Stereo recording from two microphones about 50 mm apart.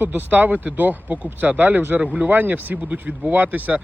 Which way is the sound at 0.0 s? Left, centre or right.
Right.